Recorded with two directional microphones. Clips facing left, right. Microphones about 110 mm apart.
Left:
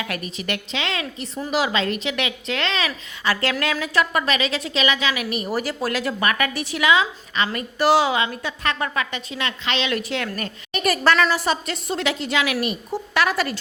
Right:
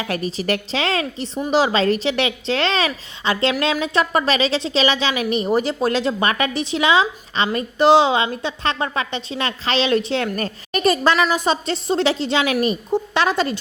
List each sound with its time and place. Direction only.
0.0 s a woman's voice: 30° right (ahead or behind)
10.3 s a woman's voice: 40° right (ahead or behind)
10.8 s a woman's voice: 20° right (ahead or behind)